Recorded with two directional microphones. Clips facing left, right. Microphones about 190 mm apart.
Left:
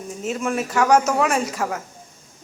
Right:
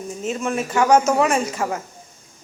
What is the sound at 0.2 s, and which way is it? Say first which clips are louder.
Speech: even; 5° left (ahead or behind).